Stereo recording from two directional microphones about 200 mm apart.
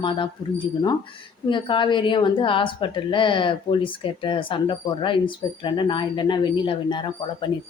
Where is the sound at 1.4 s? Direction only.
25° left (ahead or behind).